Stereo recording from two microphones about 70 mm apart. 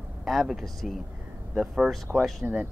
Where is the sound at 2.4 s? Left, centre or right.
Centre.